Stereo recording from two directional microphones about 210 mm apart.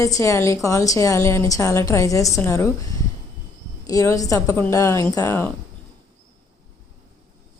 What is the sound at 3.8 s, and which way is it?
A woman's voice, 15° left (ahead or behind).